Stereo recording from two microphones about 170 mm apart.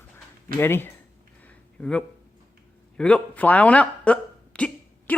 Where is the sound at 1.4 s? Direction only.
10° left (ahead or behind).